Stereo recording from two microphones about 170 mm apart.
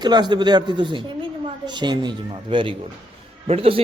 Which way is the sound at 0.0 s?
25° right (ahead or behind).